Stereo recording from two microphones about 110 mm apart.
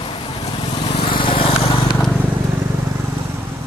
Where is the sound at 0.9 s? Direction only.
50° left (ahead or behind).